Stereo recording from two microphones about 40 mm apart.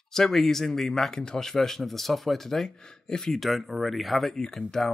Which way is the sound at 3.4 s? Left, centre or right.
Centre.